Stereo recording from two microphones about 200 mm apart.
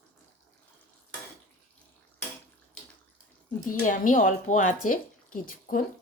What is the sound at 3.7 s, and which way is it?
Speech, 40° left (ahead or behind).